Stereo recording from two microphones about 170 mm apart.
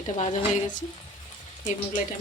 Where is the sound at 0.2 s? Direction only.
45° left (ahead or behind).